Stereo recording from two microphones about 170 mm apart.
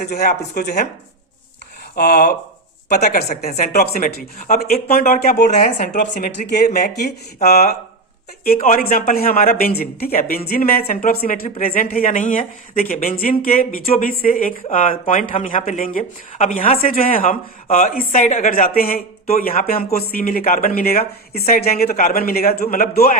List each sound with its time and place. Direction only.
0.0 s speech: 60° left (ahead or behind)
2.0 s speech: 65° left (ahead or behind)
3.0 s speech: 55° left (ahead or behind)
3.7 s speech: 65° left (ahead or behind)